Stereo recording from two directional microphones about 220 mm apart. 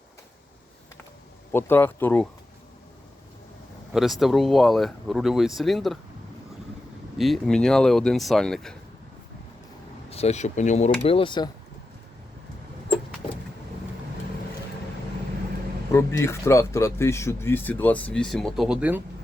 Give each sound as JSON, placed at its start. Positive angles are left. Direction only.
{"t": 1.5, "sound": "speech", "side_deg": 10}
{"t": 3.9, "sound": "speech", "side_deg": 0}
{"t": 7.2, "sound": "speech", "side_deg": 0}
{"t": 10.1, "sound": "speech", "side_deg": 30}
{"t": 15.9, "sound": "speech", "side_deg": 10}